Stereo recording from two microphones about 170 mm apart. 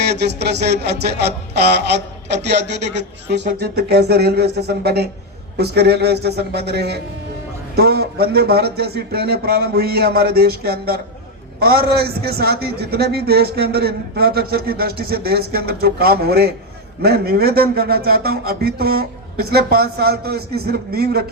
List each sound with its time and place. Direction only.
0.1 s a man's voice: 75° right (ahead or behind)
3.6 s a man's voice: 70° right (ahead or behind)